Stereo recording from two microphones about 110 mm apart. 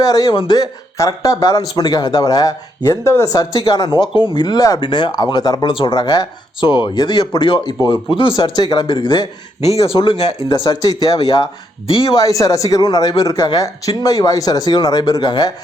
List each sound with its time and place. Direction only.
0.0 s speech: 35° left (ahead or behind)
5.7 s speech: 50° left (ahead or behind)
9.6 s speech: 70° left (ahead or behind)
10.7 s speech: 35° left (ahead or behind)
12.2 s speech: 30° left (ahead or behind)